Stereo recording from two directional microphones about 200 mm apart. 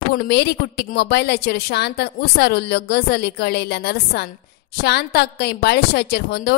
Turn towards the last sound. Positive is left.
turn(degrees=55)  # may be behind; listen again after turning